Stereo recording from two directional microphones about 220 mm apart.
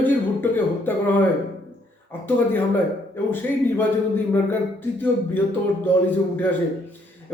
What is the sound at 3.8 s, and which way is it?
Speech, 10° left (ahead or behind).